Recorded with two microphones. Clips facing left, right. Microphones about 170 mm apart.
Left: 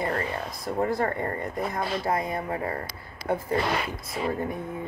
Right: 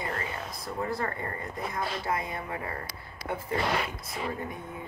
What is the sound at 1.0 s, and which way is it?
Speech, 40° left (ahead or behind).